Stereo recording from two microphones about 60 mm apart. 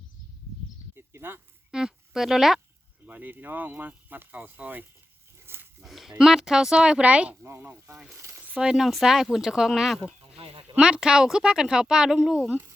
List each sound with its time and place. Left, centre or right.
0.9 s a sound: right
1.7 s speech: centre
3.1 s speech: right
5.4 s a sound: right
5.8 s speech: centre; by 7.3 s right
8.1 s speech: right
8.4 s speech: centre
8.7 s speech: centre